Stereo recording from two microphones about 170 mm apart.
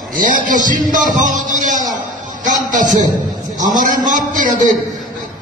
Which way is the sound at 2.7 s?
50° right (ahead or behind).